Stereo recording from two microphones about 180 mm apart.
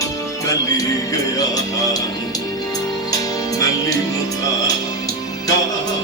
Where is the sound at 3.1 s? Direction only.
20° left (ahead or behind).